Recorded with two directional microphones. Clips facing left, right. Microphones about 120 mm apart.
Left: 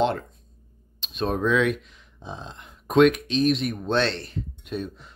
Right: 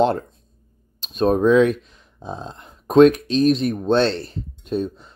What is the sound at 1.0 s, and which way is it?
Speech, 40° right (ahead or behind).